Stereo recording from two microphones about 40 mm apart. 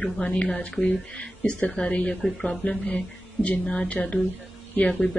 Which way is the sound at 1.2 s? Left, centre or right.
Left.